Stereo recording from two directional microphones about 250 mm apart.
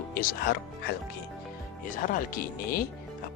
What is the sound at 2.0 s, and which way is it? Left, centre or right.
Speech, left.